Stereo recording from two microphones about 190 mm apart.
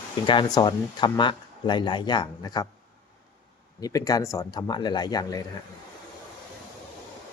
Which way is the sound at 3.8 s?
20° left (ahead or behind).